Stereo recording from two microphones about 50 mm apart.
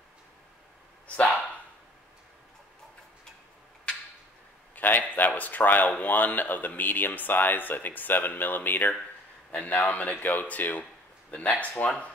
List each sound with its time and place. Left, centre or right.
1.0 s dog: left
4.7 s speech: left
9.5 s a man's voice: left